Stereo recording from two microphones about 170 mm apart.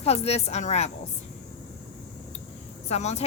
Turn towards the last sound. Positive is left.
turn(degrees=40)  # may be behind; listen again after turning